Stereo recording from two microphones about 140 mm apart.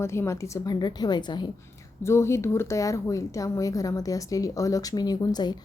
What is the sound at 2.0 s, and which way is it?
A woman's voice, 20° left (ahead or behind).